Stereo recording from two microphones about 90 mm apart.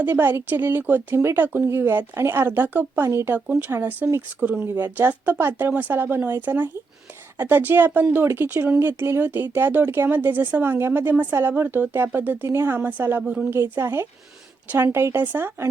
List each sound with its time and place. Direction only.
0.0 s speech: 20° right (ahead or behind)
4.6 s speech: 25° right (ahead or behind)